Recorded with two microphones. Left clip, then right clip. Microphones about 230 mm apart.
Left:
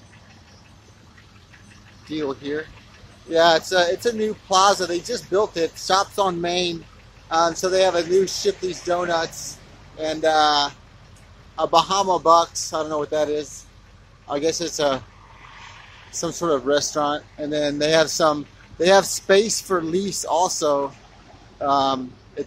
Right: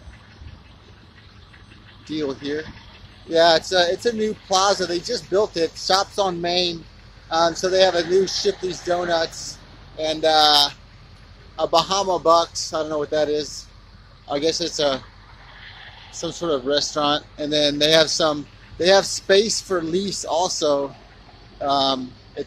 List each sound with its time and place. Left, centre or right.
2.0 s speech: centre
16.1 s speech: centre
17.0 s speech: centre